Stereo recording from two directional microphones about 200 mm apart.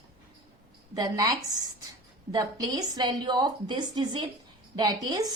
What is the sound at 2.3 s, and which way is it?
A woman's voice, 20° right (ahead or behind).